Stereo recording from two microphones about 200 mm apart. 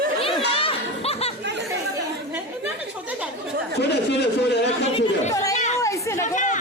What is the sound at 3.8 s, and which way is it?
Speech, 55° left (ahead or behind).